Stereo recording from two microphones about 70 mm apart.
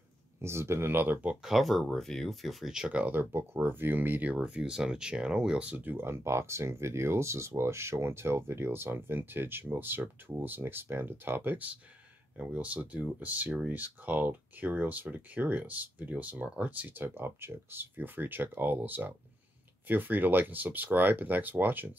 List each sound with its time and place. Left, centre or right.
0.4 s speech: right
1.3 s speech: centre; by 3.3 s right
3.3 s speech: right